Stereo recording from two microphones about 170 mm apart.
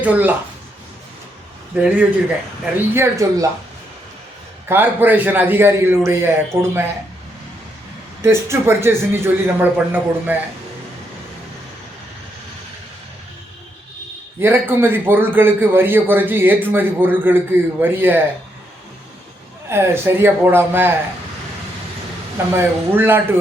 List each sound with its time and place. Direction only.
0.0 s a man's voice: 10° right (ahead or behind)
1.7 s a man's voice: 5° right (ahead or behind)
2.9 s a man's voice: 15° right (ahead or behind)
4.7 s a man's voice: 10° right (ahead or behind)
8.2 s a man's voice: 15° right (ahead or behind)
14.4 s a man's voice: 15° right (ahead or behind)
19.7 s a man's voice: 15° right (ahead or behind)
22.5 s a man's voice: 10° right (ahead or behind)